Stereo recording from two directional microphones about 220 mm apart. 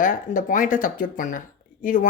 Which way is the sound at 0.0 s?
35° left (ahead or behind).